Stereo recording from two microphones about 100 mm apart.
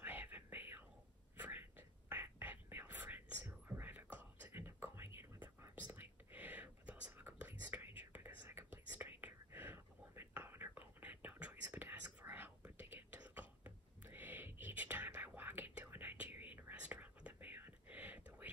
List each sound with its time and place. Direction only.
0.0 s whispering: 20° right (ahead or behind)